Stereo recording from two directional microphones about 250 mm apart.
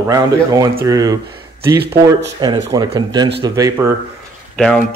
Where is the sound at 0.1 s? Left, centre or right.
Centre.